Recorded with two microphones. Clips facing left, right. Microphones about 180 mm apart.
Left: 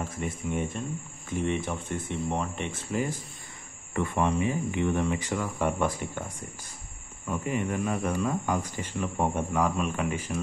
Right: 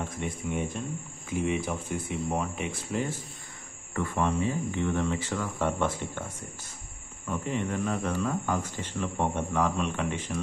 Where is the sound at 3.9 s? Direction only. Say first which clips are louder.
Left 2 dB; 20° left (ahead or behind).